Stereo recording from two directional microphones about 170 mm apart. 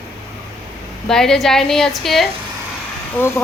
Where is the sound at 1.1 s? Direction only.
5° left (ahead or behind).